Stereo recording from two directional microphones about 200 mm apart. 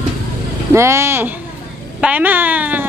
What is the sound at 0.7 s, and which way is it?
Speech, 15° right (ahead or behind).